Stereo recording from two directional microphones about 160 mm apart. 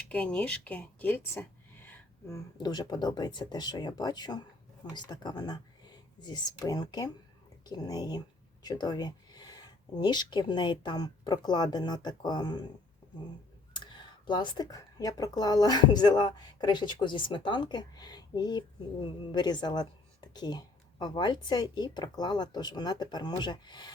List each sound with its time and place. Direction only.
0.1 s speech: 10° left (ahead or behind); by 12.6 s 25° left (ahead or behind)
13.7 s speech: 30° left (ahead or behind)